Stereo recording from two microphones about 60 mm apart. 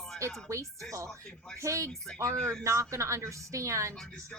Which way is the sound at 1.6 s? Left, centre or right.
Right.